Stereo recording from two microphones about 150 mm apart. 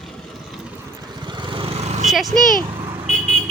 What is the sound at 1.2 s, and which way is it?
Vehicle, 30° right (ahead or behind).